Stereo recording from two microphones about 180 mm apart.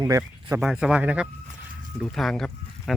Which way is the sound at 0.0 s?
20° right (ahead or behind).